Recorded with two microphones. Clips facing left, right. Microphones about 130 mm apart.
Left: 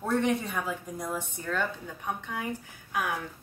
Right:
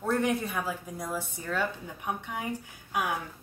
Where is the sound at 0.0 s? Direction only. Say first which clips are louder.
Left 1 dB; centre (ahead or behind).